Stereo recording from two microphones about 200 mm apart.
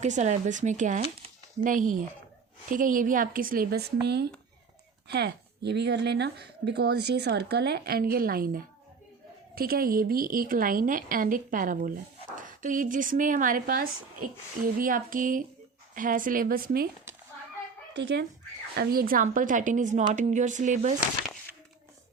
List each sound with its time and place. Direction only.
0.0 s a woman's voice: 35° right (ahead or behind)
17.9 s speech: 60° right (ahead or behind)
18.8 s speech: 45° right (ahead or behind)